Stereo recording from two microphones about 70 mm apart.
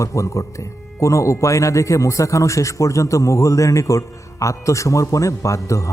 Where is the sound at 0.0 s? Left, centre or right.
Left.